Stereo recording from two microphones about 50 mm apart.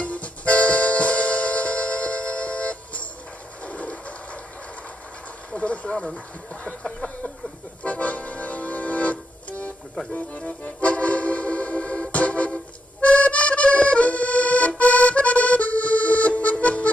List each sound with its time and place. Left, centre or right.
0.0 s music: left
3.6 s train: left
5.5 s a sound: left
7.8 s accordion: left